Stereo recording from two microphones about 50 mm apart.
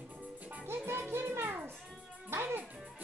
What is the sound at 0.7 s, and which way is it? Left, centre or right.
Music, right.